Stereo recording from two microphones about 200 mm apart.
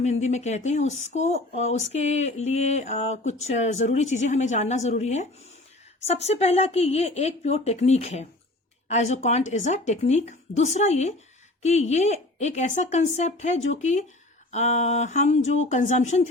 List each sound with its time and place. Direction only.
0.0 s speech: 35° left (ahead or behind)